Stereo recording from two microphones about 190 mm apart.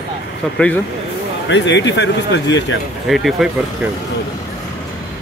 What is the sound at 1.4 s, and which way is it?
Speech, 70° left (ahead or behind).